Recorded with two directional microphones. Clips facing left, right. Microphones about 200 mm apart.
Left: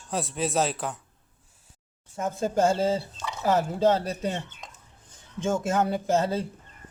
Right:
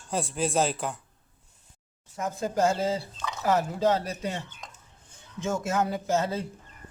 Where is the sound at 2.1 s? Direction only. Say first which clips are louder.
Left 2 dB; 30° left (ahead or behind).